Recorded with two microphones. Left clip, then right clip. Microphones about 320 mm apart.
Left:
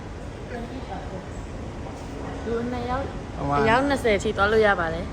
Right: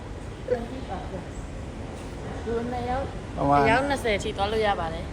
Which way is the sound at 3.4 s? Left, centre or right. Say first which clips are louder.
Right 3 dB; centre.